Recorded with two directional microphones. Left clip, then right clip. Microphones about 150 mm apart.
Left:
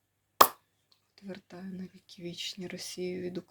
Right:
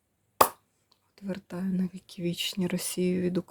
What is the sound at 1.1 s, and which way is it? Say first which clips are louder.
Speech: right 8 dB; 65° right (ahead or behind).